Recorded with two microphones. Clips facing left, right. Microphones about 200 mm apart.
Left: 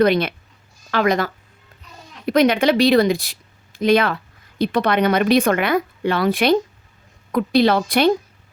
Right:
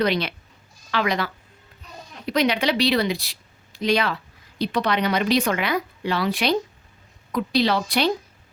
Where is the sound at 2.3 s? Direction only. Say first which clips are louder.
Left 6 dB; 50° left (ahead or behind).